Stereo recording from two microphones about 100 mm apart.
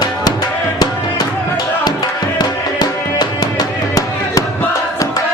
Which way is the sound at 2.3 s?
45° left (ahead or behind).